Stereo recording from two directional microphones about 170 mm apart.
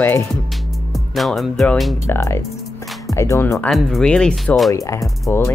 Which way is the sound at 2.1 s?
15° left (ahead or behind).